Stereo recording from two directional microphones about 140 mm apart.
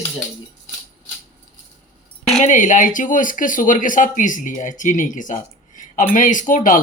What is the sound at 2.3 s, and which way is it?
Speech, 65° left (ahead or behind).